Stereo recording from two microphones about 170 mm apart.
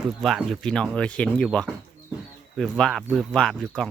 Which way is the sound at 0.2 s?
Centre (ahead or behind).